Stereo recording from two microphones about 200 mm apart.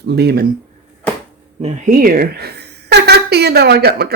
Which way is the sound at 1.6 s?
40° right (ahead or behind).